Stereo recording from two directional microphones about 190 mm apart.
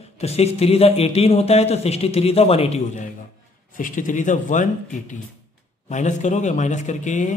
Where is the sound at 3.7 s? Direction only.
45° left (ahead or behind).